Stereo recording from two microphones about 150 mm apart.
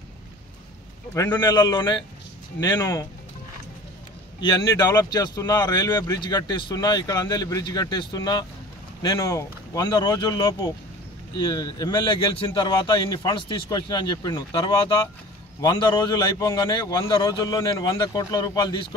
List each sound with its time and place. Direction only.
1.1 s speech: 20° left (ahead or behind)
4.4 s speech: 30° left (ahead or behind)